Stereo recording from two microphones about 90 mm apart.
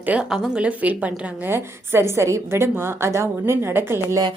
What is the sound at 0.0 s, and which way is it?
A woman's voice, 15° right (ahead or behind).